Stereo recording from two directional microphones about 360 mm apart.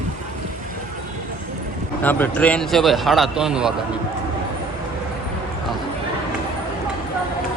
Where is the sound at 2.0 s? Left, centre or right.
Centre.